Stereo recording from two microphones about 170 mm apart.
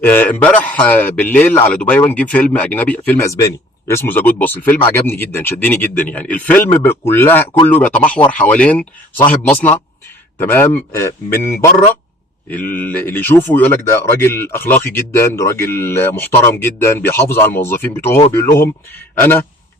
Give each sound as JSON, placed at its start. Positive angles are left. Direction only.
{"t": 0.0, "sound": "speech", "side_deg": 10}